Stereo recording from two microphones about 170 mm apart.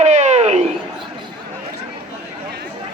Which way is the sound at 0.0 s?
45° right (ahead or behind).